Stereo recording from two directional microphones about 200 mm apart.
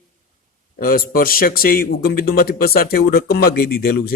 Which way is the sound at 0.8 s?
45° left (ahead or behind).